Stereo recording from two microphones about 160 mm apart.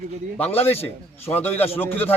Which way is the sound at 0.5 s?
40° left (ahead or behind).